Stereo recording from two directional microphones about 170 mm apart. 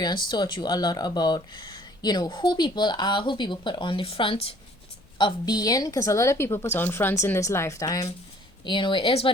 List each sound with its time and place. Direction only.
0.0 s a woman's voice: 25° left (ahead or behind)